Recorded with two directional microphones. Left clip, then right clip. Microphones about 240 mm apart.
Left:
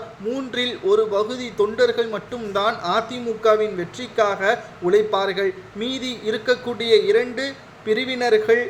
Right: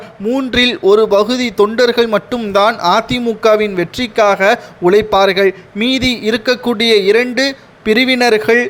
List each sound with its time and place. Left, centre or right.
0.3 s a man's voice: right